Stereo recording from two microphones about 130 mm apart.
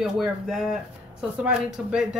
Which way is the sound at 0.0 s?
5° right (ahead or behind).